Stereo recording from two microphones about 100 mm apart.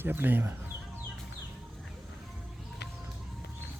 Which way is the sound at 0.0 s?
20° right (ahead or behind).